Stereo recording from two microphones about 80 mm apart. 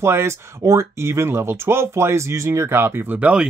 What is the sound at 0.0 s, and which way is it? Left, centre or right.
Speech, right.